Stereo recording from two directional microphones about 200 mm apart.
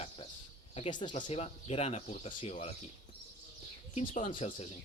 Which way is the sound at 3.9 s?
35° left (ahead or behind).